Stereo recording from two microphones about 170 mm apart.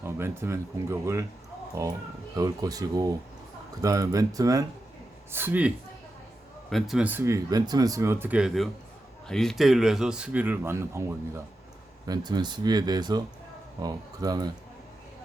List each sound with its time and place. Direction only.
0.0 s speech: 15° right (ahead or behind)
12.0 s speech: 25° right (ahead or behind)